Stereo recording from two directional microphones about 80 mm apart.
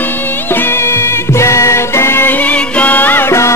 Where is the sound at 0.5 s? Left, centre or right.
Left.